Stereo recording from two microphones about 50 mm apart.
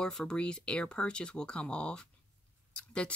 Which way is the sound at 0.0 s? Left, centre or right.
Centre.